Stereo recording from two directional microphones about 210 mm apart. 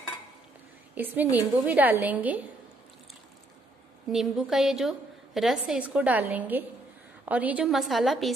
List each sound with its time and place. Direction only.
0.9 s a woman's voice: 10° right (ahead or behind)
4.1 s a woman's voice: centre (ahead or behind)